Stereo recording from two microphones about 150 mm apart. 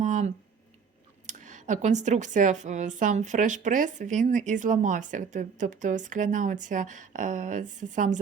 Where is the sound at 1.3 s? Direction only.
55° right (ahead or behind).